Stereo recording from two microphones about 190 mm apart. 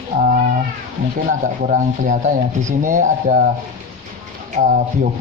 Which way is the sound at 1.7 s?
45° right (ahead or behind).